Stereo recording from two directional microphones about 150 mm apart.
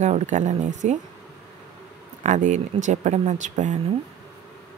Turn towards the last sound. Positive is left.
turn(degrees=-55)  # may be behind; listen again after turning